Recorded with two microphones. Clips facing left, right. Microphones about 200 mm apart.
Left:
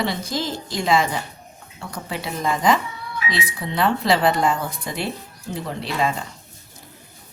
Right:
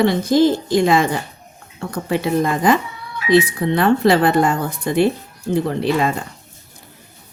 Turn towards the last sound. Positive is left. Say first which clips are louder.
# right 6 dB
turn(degrees=-50)  # may be behind; listen again after turning